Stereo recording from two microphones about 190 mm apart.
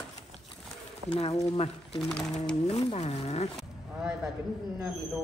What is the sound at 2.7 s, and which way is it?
Speech, 35° left (ahead or behind).